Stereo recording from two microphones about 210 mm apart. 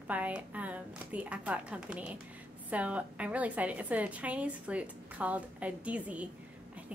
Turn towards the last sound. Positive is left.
turn(degrees=-5)  # may be behind; listen again after turning